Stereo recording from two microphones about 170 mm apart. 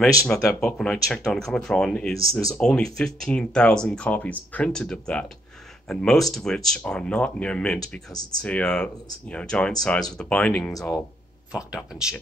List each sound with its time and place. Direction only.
0.0 s speech: 20° left (ahead or behind)
0.6 s speech: 5° left (ahead or behind)